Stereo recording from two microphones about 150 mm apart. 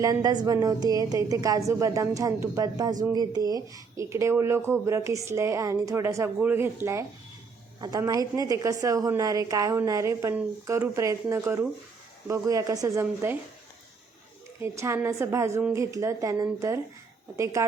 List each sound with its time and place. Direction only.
0.0 s speech: 25° right (ahead or behind)
14.6 s speech: 15° right (ahead or behind)